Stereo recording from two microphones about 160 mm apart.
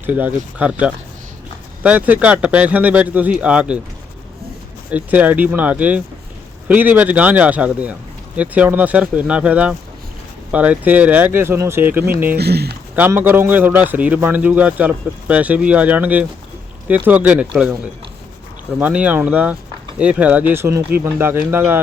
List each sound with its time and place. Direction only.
0.0 s a man's voice: 10° right (ahead or behind)
4.9 s a man's voice: 10° right (ahead or behind)
12.4 s speech: 90° right
13.0 s a man's voice: 10° right (ahead or behind)
18.8 s a man's voice: 10° right (ahead or behind)